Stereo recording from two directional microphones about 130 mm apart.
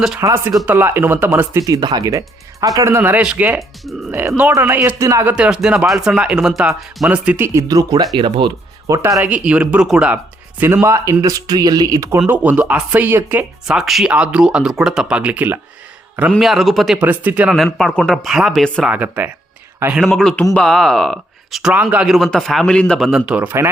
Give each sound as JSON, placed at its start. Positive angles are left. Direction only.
{"t": 0.2, "sound": "speech", "side_deg": -20}
{"t": 5.3, "sound": "speech", "side_deg": -5}
{"t": 7.7, "sound": "speech", "side_deg": -30}
{"t": 8.9, "sound": "speech", "side_deg": -25}
{"t": 9.2, "sound": "speech", "side_deg": -10}
{"t": 10.6, "sound": "speech", "side_deg": -15}
{"t": 12.3, "sound": "speech", "side_deg": -10}
{"t": 13.7, "sound": "speech", "side_deg": 0}
{"t": 16.4, "sound": "speech", "side_deg": 0}
{"t": 17.0, "sound": "speech", "side_deg": -15}
{"t": 17.5, "sound": "speech", "side_deg": 0}
{"t": 18.9, "sound": "speech", "side_deg": -15}
{"t": 20.1, "sound": "speech", "side_deg": 5}